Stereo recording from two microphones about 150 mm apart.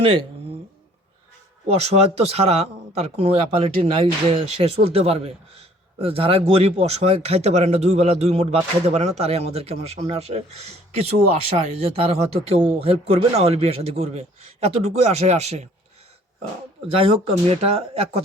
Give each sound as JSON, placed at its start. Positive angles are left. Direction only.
{"t": 0.0, "sound": "speech", "side_deg": -35}
{"t": 1.6, "sound": "a man's voice", "side_deg": -45}
{"t": 17.0, "sound": "speech", "side_deg": -40}